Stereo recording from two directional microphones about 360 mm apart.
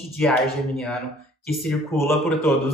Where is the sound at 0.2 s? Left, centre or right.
Centre.